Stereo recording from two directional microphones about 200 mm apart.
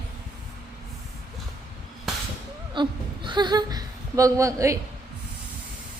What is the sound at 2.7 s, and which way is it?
Speech, 25° right (ahead or behind).